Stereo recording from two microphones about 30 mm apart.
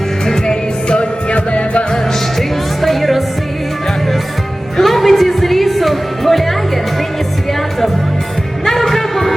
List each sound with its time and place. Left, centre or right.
0.9 s music: left
2.8 s music: centre
4.8 s music: centre
8.9 s music: centre